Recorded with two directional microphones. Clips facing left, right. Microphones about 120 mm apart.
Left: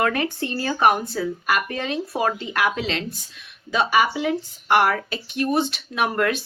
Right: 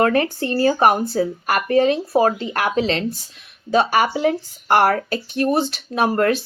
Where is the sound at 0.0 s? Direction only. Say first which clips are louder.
Right 5 dB; 35° right (ahead or behind).